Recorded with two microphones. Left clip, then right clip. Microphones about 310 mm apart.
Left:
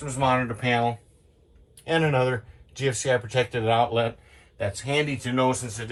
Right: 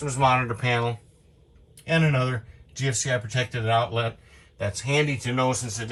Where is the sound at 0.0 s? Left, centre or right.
Centre.